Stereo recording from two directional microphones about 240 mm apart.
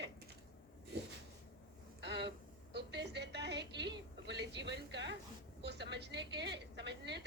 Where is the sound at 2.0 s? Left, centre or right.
Right.